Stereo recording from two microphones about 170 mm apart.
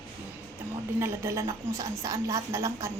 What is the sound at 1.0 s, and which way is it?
A woman's voice, 15° right (ahead or behind).